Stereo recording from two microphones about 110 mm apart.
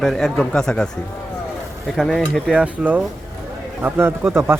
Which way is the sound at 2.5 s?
10° right (ahead or behind).